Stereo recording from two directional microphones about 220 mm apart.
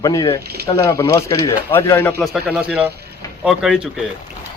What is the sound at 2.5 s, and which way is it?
Speech, 5° right (ahead or behind).